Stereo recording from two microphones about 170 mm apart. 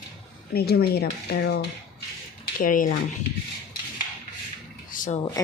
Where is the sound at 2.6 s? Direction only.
55° left (ahead or behind).